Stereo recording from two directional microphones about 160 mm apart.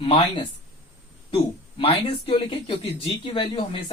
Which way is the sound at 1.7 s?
40° left (ahead or behind).